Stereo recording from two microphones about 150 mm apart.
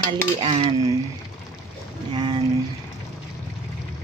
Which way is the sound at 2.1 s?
30° right (ahead or behind).